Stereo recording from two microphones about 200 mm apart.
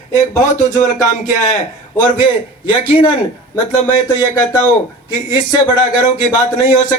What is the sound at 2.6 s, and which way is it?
Speech, 25° left (ahead or behind).